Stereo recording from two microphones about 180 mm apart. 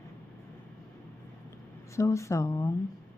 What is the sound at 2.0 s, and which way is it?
Speech, 15° left (ahead or behind).